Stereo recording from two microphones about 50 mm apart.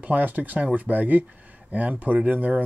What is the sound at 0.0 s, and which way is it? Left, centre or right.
Speech, right.